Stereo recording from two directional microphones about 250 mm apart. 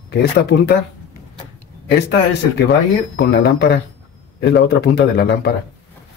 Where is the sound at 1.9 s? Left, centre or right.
Left.